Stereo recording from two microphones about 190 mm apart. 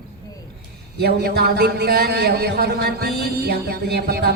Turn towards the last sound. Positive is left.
turn(degrees=-55)  # may be behind; listen again after turning